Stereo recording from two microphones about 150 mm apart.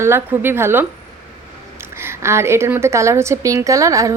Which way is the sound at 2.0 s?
15° right (ahead or behind).